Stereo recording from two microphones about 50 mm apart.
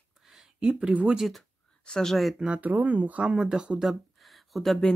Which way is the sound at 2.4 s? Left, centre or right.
Right.